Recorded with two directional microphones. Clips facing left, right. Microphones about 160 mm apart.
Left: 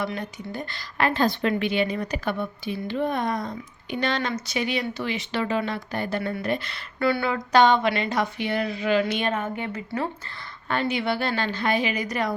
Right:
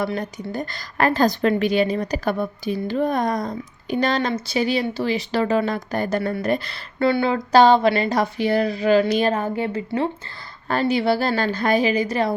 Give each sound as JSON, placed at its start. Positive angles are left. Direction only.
{"t": 0.0, "sound": "speech", "side_deg": -40}